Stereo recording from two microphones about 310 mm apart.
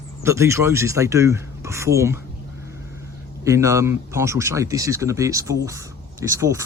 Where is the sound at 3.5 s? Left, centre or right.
Centre.